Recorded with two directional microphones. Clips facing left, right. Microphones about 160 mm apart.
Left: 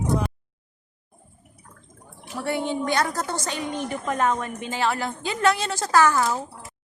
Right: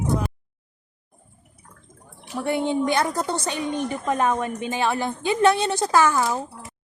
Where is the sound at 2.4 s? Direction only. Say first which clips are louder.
Right 3 dB; 20° right (ahead or behind).